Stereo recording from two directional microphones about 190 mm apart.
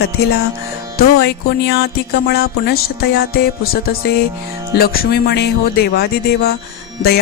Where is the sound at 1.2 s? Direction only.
60° left (ahead or behind).